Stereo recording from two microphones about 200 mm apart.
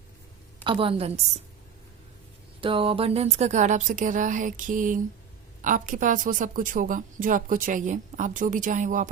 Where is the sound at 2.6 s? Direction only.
25° right (ahead or behind).